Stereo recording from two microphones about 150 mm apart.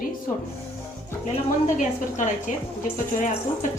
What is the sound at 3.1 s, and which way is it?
Speech, 60° left (ahead or behind).